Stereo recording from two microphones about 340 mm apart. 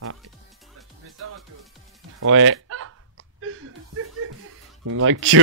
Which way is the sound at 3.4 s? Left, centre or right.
Right.